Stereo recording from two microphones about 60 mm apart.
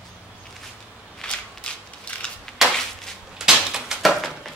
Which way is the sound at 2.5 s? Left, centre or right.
Centre.